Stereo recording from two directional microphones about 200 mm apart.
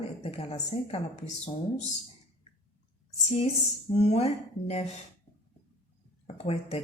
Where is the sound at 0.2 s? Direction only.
30° left (ahead or behind).